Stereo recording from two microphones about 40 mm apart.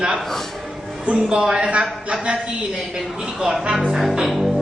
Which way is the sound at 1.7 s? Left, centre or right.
Right.